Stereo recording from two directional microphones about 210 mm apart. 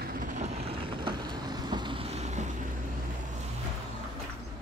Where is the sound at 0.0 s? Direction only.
40° right (ahead or behind).